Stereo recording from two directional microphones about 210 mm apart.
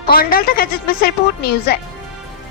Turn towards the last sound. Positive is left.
turn(degrees=50)  # may be behind; listen again after turning